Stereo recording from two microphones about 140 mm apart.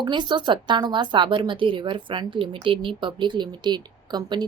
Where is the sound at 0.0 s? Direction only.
35° right (ahead or behind).